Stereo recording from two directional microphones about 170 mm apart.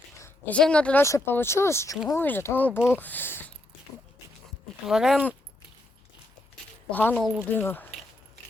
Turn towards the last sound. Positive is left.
turn(degrees=10)  # may be behind; listen again after turning